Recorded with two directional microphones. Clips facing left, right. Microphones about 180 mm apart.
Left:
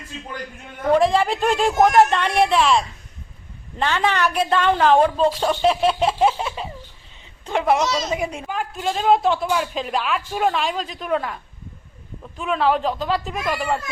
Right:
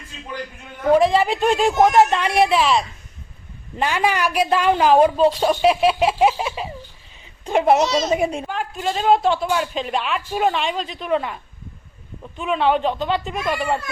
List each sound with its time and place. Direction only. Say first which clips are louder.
0.9 s a woman's voice: right 1 dB; centre (ahead or behind)
7.4 s a child's voice: right 3 dB; 20° right (ahead or behind)
8.4 s speech: even; centre (ahead or behind)